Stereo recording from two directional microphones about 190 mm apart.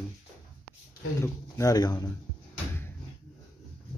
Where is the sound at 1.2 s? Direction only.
15° left (ahead or behind).